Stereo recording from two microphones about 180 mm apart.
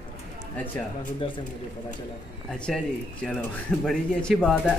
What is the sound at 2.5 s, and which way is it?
Speech, 5° left (ahead or behind).